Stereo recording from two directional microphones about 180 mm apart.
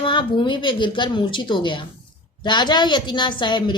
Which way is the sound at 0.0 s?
25° left (ahead or behind).